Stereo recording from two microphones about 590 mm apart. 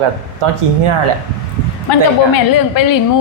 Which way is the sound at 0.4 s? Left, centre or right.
Right.